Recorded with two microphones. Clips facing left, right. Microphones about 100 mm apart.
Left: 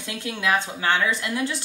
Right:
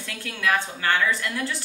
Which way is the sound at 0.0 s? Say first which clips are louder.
Left 1 dB; 20° left (ahead or behind).